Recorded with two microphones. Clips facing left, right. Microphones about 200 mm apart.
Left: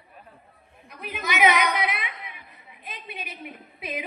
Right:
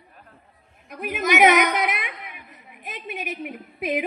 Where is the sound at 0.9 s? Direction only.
50° right (ahead or behind).